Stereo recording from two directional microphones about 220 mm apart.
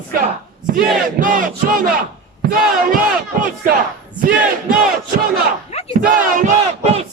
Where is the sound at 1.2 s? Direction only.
40° right (ahead or behind).